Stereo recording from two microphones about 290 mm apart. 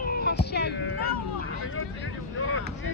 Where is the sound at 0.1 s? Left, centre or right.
Left.